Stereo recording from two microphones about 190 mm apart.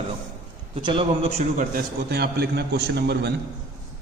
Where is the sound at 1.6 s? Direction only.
50° right (ahead or behind).